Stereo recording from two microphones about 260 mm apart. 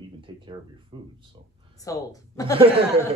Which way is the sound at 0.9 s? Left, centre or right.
Centre.